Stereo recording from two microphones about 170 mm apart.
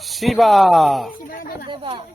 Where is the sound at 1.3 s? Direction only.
55° left (ahead or behind).